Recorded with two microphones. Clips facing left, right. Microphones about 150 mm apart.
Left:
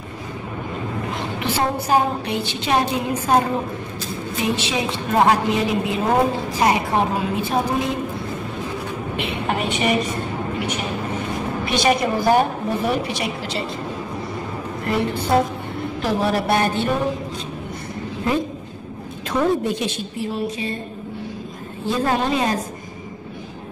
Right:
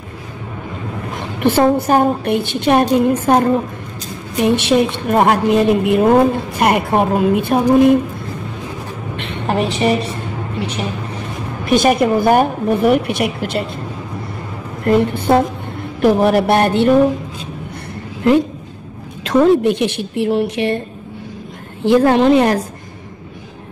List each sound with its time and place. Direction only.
1.4 s a woman's voice: 55° right (ahead or behind)
4.4 s a woman's voice: 60° right (ahead or behind)
9.1 s a sound: 5° left (ahead or behind)
9.5 s a woman's voice: 35° right (ahead or behind)
11.6 s a woman's voice: 50° right (ahead or behind)
14.9 s a woman's voice: 55° right (ahead or behind)
19.2 s a woman's voice: 80° right
21.8 s a woman's voice: 70° right (ahead or behind)